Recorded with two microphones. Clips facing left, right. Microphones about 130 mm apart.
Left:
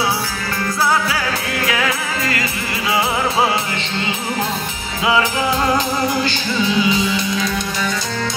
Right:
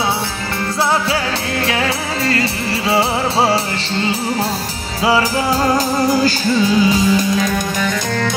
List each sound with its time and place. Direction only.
1.7 s music: 30° right (ahead or behind)
5.0 s music: 35° right (ahead or behind)